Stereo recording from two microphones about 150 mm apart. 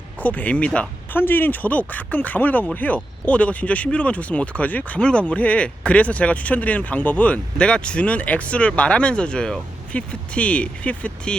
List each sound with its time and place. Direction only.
0.2 s speech: 10° left (ahead or behind)